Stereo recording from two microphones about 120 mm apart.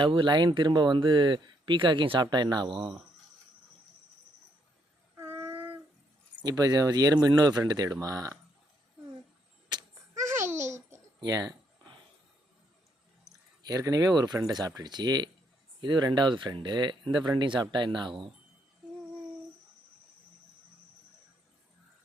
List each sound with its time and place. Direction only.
0.0 s speech: 45° right (ahead or behind)
5.1 s a sound: 20° right (ahead or behind)
6.4 s speech: 30° right (ahead or behind)
9.6 s a sound: 30° right (ahead or behind)
10.5 s babbling: 80° right
10.8 s babbling: 20° right (ahead or behind)
11.2 s speech: 35° right (ahead or behind)
13.7 s speech: 30° right (ahead or behind)